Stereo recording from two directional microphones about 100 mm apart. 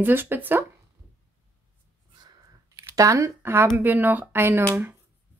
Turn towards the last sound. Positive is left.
turn(degrees=-25)  # may be behind; listen again after turning